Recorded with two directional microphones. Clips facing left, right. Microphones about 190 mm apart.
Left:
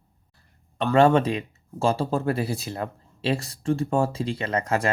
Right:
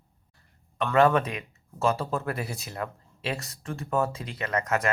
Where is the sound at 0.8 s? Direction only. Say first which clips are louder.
Left 3 dB; 30° left (ahead or behind).